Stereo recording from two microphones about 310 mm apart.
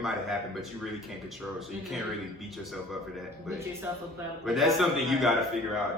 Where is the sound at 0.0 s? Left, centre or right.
Centre.